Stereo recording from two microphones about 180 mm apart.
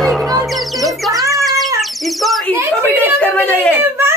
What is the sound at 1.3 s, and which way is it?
Cat, centre (ahead or behind).